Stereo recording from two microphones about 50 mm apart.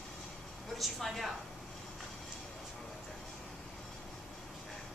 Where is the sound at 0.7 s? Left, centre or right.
Centre.